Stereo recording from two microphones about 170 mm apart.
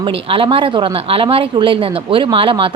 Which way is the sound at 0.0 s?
30° right (ahead or behind).